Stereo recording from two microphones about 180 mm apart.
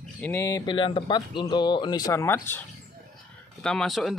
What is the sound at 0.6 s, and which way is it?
Speech, 30° left (ahead or behind).